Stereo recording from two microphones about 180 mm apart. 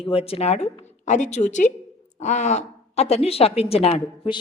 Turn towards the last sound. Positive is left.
turn(degrees=30)  # may be behind; listen again after turning